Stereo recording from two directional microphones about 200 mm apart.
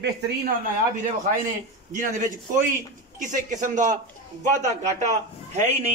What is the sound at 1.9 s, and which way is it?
A man's voice, 40° right (ahead or behind).